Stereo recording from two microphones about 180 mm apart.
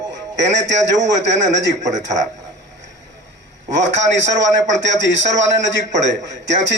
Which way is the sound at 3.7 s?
90° right.